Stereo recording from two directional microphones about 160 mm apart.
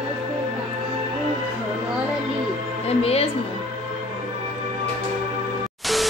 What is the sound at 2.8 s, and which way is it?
Music, 40° left (ahead or behind).